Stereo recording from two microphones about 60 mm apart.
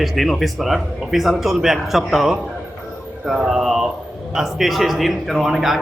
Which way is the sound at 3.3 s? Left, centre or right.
Centre.